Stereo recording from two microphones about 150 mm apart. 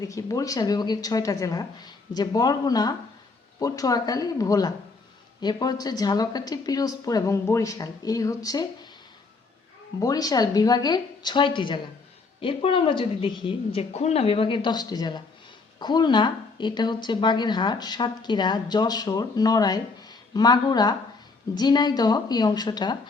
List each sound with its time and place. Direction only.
0.0 s a woman's voice: 20° left (ahead or behind)
10.0 s a woman's voice: 25° left (ahead or behind)